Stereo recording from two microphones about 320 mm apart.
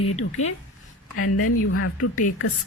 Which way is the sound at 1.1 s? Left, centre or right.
Left.